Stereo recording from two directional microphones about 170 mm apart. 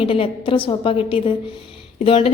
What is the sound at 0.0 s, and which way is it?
A woman's voice, 35° left (ahead or behind).